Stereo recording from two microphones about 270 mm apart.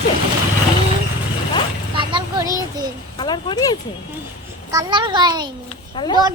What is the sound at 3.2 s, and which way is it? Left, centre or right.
Speech, centre.